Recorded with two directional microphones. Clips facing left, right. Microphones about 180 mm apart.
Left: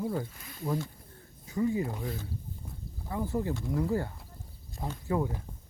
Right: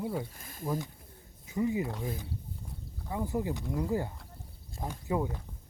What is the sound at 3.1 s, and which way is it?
Speech, 15° right (ahead or behind).